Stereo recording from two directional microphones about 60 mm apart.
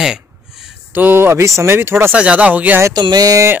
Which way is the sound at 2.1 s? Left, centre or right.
Right.